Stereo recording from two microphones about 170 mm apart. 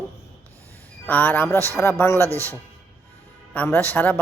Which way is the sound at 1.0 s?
10° left (ahead or behind).